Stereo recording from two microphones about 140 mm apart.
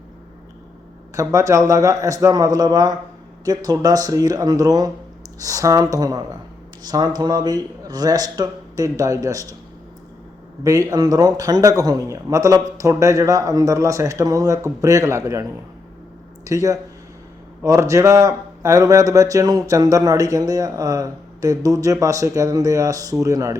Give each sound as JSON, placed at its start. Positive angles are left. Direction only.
{"t": 1.1, "sound": "speech", "side_deg": -20}
{"t": 10.6, "sound": "speech", "side_deg": -25}